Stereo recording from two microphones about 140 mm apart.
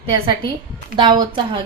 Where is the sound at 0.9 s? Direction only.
30° right (ahead or behind).